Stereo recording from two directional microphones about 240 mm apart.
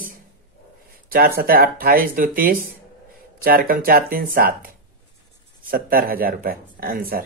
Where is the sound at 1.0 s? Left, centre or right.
Right.